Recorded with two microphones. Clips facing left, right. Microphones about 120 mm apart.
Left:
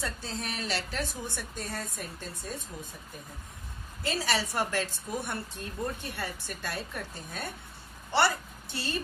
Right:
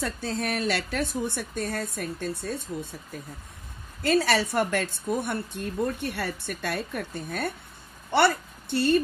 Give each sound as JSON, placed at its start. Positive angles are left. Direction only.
{"t": 0.0, "sound": "a woman's voice", "side_deg": -60}
{"t": 4.0, "sound": "a woman's voice", "side_deg": -60}
{"t": 6.0, "sound": "a woman's voice", "side_deg": -70}